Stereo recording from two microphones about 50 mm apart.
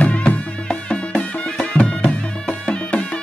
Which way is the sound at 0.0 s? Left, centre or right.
Left.